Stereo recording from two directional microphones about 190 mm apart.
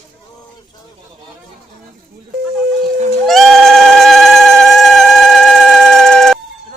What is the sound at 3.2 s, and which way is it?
Goat, centre (ahead or behind).